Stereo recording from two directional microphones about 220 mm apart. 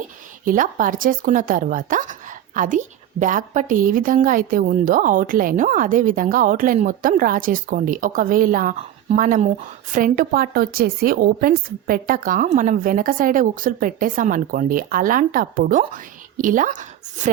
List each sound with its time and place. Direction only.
0.4 s speech: 40° right (ahead or behind)